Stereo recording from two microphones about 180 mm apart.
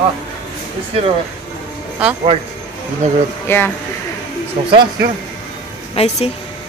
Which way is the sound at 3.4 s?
10° left (ahead or behind).